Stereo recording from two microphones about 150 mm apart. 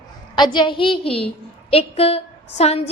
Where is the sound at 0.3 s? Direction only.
30° left (ahead or behind).